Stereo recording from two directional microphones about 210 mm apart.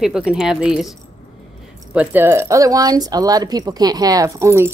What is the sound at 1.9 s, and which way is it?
Speech, 10° right (ahead or behind).